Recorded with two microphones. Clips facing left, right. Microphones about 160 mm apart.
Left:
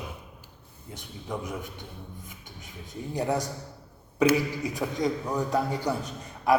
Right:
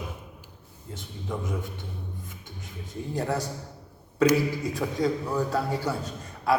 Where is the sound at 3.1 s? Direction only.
15° left (ahead or behind).